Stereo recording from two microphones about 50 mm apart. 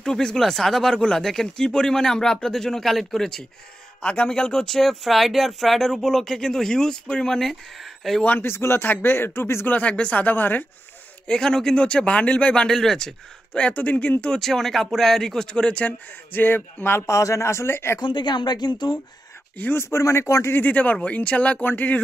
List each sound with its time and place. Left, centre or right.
0.0 s speech: centre
4.0 s speech: left; by 8.2 s centre
8.4 s speech: left
8.8 s speech: left
9.7 s speech: left
11.2 s a man's voice: centre
12.6 s speech: centre
13.6 s a man's voice: left
14.4 s speech: centre
15.8 s speech: left
17.0 s speech: left
19.7 s speech: left
20.5 s a man's voice: left